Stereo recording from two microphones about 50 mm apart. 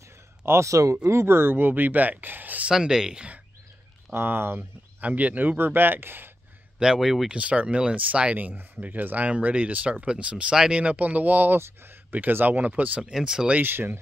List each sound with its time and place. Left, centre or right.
0.5 s speech: right
1.0 s speech: right
2.7 s speech: centre
4.1 s speech: right
5.0 s speech: right
6.8 s speech: centre
7.2 s speech: right
11.5 s speech: right
13.1 s speech: centre
13.6 s speech: right